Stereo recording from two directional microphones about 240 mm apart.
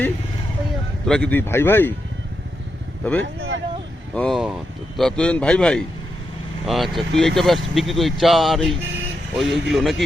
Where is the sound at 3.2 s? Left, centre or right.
Right.